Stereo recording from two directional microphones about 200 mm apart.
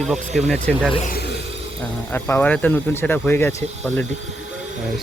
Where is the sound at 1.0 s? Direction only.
50° left (ahead or behind).